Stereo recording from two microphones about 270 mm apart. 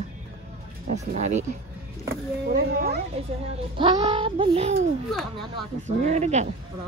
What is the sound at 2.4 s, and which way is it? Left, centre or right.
Speech, right.